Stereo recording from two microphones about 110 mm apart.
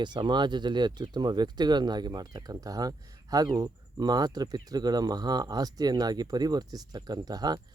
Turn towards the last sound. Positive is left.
turn(degrees=-35)  # may be behind; listen again after turning